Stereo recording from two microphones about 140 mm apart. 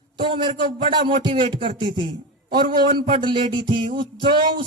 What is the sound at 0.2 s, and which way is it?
Speech, 35° right (ahead or behind).